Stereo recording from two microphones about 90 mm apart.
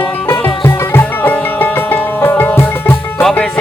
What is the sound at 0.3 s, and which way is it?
Music, 25° left (ahead or behind).